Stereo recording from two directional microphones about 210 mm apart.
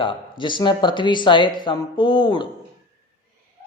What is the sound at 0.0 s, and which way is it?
A man's voice, 25° left (ahead or behind).